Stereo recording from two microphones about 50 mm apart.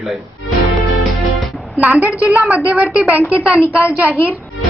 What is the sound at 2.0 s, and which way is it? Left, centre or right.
A woman's voice, right.